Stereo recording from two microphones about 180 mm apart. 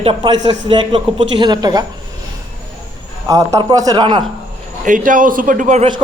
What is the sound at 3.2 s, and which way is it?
Speech, 20° right (ahead or behind).